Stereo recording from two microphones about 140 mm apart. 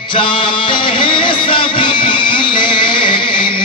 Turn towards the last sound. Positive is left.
turn(degrees=35)  # may be behind; listen again after turning